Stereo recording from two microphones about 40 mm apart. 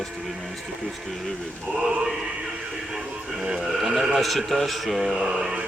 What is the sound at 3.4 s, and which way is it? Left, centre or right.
Speech, centre.